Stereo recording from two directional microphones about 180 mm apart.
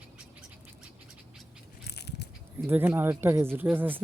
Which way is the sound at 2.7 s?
10° right (ahead or behind).